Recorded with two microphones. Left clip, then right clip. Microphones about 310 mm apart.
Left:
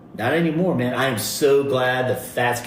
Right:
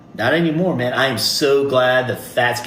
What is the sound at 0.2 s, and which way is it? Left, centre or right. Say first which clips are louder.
Speech: right 4 dB; right.